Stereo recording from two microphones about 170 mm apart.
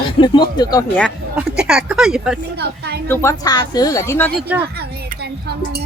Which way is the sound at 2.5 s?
75° right (ahead or behind).